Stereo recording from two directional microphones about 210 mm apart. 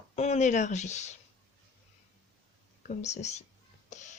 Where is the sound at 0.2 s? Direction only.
30° left (ahead or behind).